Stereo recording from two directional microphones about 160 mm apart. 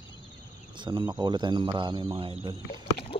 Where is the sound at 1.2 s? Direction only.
30° right (ahead or behind).